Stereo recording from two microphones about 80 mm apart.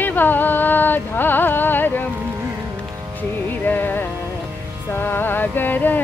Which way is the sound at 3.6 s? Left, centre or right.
Left.